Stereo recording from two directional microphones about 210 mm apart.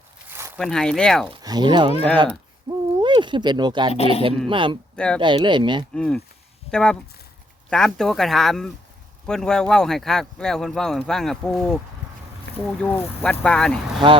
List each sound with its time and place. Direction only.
0.3 s a sound: 10° right (ahead or behind)
0.6 s speech: 5° left (ahead or behind)
1.3 s speech: 20° right (ahead or behind)
2.6 s owl: 20° right (ahead or behind)
3.9 s speech: 30° left (ahead or behind)
4.4 s speech: 25° right (ahead or behind)
4.9 s speech: 5° left (ahead or behind)
5.2 s speech: 20° right (ahead or behind)
5.9 s speech: 5° left (ahead or behind)
12.5 s boat: 55° left (ahead or behind)
12.8 s speech: 5° left (ahead or behind)